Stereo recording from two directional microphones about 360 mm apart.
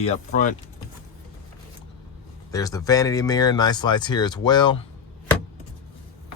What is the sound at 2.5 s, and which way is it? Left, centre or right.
Speech, centre.